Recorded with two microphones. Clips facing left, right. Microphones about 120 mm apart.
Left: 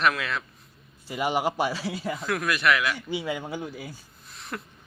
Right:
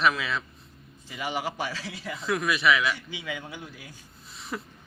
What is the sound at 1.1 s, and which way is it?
Speech, 50° left (ahead or behind).